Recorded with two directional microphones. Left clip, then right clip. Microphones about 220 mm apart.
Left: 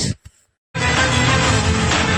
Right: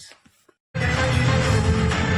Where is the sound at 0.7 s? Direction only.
15° left (ahead or behind).